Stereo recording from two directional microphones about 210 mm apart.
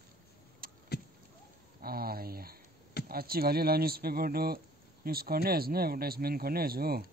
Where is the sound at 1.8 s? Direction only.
45° right (ahead or behind).